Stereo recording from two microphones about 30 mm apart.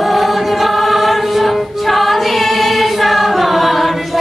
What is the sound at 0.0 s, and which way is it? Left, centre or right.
Choir, centre.